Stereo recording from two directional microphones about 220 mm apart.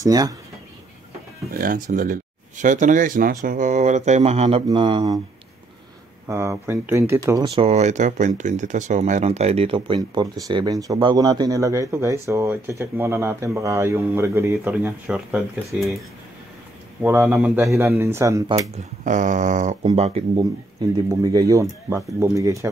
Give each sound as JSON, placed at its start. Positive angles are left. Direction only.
{"t": 0.0, "sound": "speech", "side_deg": -15}
{"t": 1.5, "sound": "speech", "side_deg": -40}
{"t": 6.2, "sound": "speech", "side_deg": -10}
{"t": 7.4, "sound": "speech", "side_deg": -25}
{"t": 17.0, "sound": "speech", "side_deg": -10}
{"t": 19.0, "sound": "speech", "side_deg": -35}
{"t": 20.9, "sound": "speech", "side_deg": -15}